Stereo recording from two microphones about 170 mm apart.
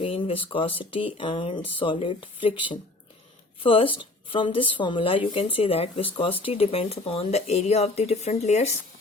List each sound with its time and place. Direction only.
0.0 s speech: 35° left (ahead or behind)
3.6 s speech: 30° left (ahead or behind)